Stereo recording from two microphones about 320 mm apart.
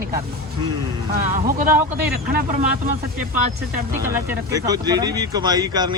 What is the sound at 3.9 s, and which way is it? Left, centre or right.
Speech, centre.